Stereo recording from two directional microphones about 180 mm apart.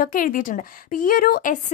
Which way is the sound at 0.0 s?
50° left (ahead or behind).